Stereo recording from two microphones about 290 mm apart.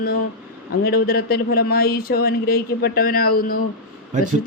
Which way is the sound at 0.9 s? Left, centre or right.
Left.